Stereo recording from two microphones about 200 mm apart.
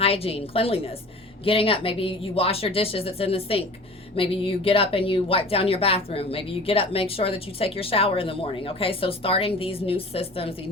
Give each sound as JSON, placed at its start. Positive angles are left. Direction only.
{"t": 0.0, "sound": "a woman's voice", "side_deg": 30}